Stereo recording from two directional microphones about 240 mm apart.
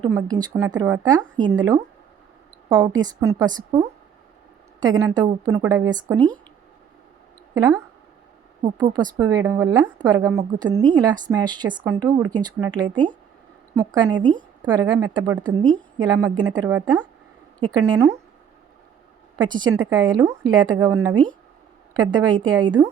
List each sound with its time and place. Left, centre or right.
0.0 s a woman's voice: centre
2.8 s a woman's voice: centre
6.1 s speech: centre
7.5 s speech: centre
9.0 s a woman's voice: centre
19.4 s a woman's voice: centre